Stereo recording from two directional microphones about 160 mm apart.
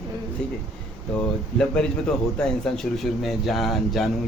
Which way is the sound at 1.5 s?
5° left (ahead or behind).